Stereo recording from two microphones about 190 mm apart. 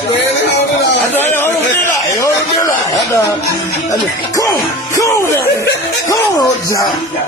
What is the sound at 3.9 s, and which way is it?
Speech, 15° left (ahead or behind).